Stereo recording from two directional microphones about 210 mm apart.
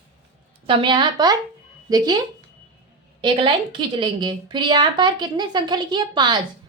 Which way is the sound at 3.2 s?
25° right (ahead or behind).